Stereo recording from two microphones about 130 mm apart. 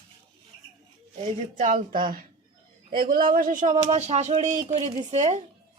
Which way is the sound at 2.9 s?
90° right.